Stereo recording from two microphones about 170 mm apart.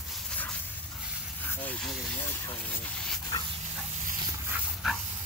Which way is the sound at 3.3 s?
25° left (ahead or behind).